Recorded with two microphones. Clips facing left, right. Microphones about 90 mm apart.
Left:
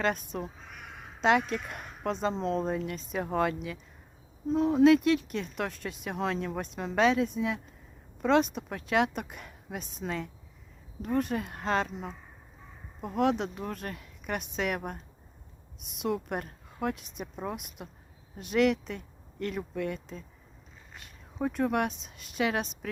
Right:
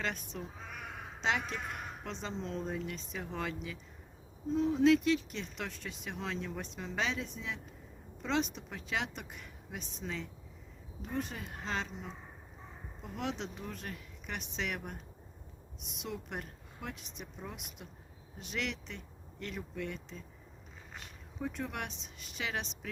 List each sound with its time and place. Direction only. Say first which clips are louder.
0.0 s speech: left 8 dB; 45° left (ahead or behind)
21.3 s speech: left 10 dB; 55° left (ahead or behind)